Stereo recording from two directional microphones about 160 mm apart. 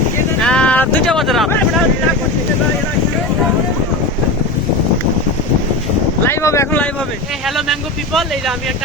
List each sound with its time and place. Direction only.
0.4 s vehicle: 5° left (ahead or behind)
6.2 s speech: 15° left (ahead or behind)
7.4 s speech: centre (ahead or behind)